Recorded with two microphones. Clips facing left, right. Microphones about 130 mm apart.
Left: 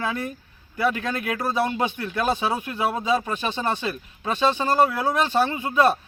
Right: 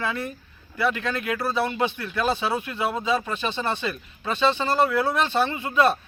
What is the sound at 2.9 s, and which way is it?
Speech, 10° left (ahead or behind).